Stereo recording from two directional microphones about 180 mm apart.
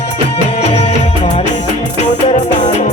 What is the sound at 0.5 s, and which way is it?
Music, 35° left (ahead or behind).